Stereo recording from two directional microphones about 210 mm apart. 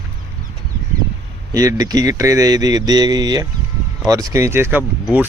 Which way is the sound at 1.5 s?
15° right (ahead or behind).